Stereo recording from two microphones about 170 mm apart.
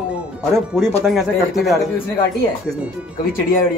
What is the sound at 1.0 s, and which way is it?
Speech, centre (ahead or behind).